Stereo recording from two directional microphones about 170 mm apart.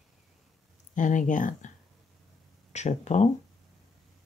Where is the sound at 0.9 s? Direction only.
50° left (ahead or behind).